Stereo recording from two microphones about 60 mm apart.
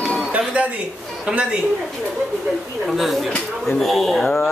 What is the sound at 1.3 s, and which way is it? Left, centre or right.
Speech, centre.